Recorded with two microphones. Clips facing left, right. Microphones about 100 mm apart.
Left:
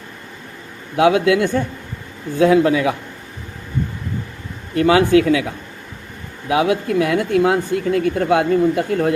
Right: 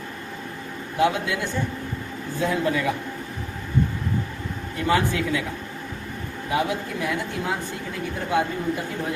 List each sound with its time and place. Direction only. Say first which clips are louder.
0.9 s speech: left 9 dB; 90° left
4.7 s a man's voice: left 10 dB; 80° left
6.5 s speech: left 8 dB; 90° left; by 9.1 s 65° left (ahead or behind)